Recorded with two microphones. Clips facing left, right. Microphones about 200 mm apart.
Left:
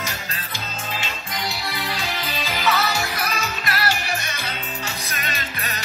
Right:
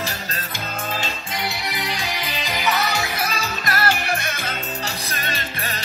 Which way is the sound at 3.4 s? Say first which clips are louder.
Right 2 dB; 45° right (ahead or behind).